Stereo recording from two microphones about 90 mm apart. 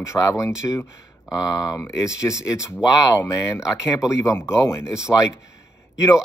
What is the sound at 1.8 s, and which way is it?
Speech, 35° left (ahead or behind).